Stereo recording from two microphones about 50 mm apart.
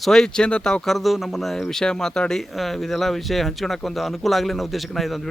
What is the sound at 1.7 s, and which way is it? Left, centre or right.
Speech, centre.